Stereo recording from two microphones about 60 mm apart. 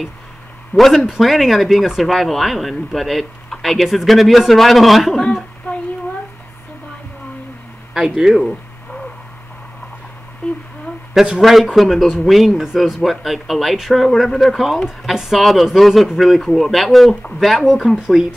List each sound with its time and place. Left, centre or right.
0.7 s speech: centre
5.7 s a sound: left
7.9 s bird: centre
11.3 s speech: centre